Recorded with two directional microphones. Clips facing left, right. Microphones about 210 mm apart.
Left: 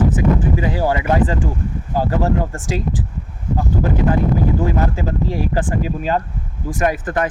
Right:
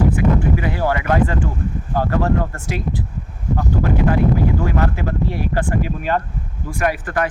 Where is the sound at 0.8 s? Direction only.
15° left (ahead or behind).